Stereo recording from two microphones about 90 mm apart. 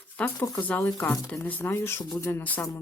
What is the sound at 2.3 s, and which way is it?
Speech, 20° left (ahead or behind).